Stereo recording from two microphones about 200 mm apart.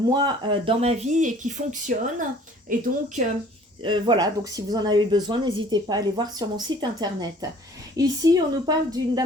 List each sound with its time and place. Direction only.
0.1 s speech: 20° right (ahead or behind); by 2.8 s 45° right (ahead or behind)
3.8 s speech: 25° right (ahead or behind)